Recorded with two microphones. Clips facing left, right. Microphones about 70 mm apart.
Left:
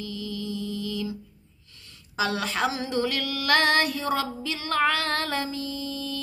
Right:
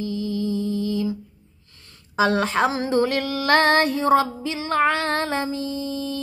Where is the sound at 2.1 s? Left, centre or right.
Right.